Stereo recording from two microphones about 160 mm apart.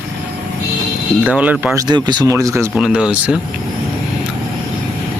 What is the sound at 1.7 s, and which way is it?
Speech, 25° right (ahead or behind).